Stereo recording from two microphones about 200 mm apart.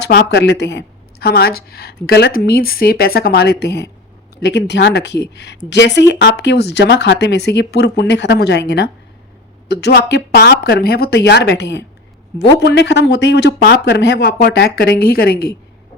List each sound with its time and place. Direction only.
0.0 s a woman's voice: 55° left (ahead or behind)